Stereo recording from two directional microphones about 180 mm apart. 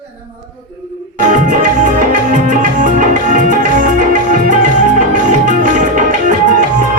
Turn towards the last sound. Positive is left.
turn(degrees=-45)  # may be behind; listen again after turning